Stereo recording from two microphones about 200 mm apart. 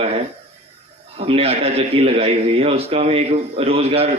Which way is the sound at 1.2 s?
30° right (ahead or behind).